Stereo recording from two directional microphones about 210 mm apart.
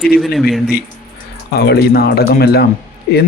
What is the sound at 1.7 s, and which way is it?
Speech, 45° left (ahead or behind).